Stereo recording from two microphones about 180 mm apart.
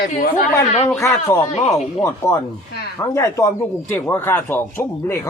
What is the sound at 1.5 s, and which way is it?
Speech, 35° left (ahead or behind).